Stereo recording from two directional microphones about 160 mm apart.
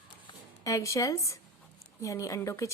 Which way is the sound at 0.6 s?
20° left (ahead or behind).